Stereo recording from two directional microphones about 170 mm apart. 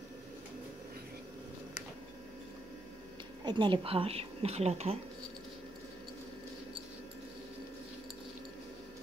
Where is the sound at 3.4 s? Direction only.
25° right (ahead or behind).